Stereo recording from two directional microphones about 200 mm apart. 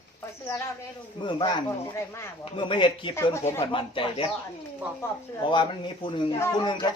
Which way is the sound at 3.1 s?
15° left (ahead or behind).